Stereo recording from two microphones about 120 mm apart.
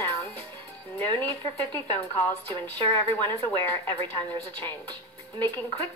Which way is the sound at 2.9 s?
20° left (ahead or behind).